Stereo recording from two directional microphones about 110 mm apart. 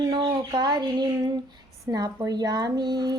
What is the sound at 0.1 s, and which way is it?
A woman's voice, 40° right (ahead or behind).